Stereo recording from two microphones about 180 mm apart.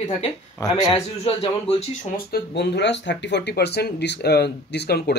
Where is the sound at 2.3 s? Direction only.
70° left (ahead or behind).